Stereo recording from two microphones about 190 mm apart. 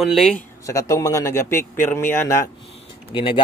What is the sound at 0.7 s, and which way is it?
A man's voice, 15° left (ahead or behind).